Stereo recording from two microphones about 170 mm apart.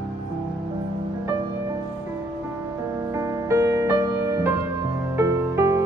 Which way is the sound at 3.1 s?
15° right (ahead or behind).